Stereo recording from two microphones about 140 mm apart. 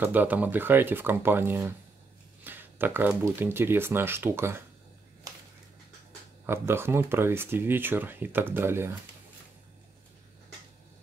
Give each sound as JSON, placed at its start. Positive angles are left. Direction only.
{"t": 0.0, "sound": "speech", "side_deg": -10}
{"t": 6.4, "sound": "speech", "side_deg": -15}